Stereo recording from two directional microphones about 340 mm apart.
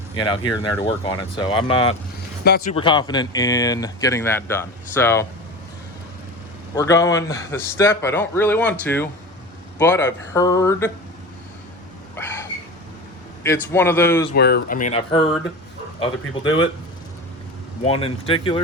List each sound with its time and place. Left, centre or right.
0.2 s speech: centre
2.4 s speech: left
2.7 s speech: centre
6.7 s speech: centre
12.1 s a sound: centre
13.4 s speech: centre
14.3 s speech: left
17.8 s speech: centre